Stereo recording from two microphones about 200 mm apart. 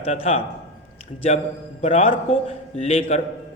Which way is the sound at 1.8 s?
30° left (ahead or behind).